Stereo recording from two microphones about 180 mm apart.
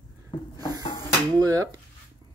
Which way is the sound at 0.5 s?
20° right (ahead or behind).